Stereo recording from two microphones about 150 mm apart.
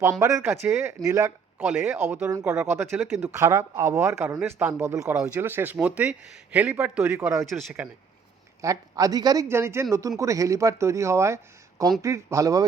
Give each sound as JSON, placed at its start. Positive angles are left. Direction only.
{"t": 0.2, "sound": "speech", "side_deg": -20}
{"t": 8.6, "sound": "speech", "side_deg": -25}